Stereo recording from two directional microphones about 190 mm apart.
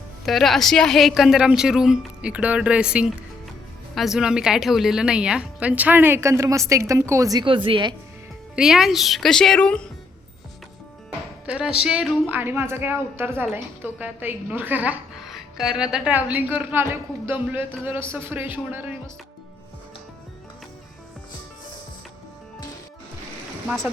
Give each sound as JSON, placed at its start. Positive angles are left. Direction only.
{"t": 0.3, "sound": "a woman's voice", "side_deg": 0}
{"t": 8.5, "sound": "a woman's voice", "side_deg": -5}
{"t": 11.4, "sound": "a woman's voice", "side_deg": -5}
{"t": 23.6, "sound": "speech", "side_deg": 0}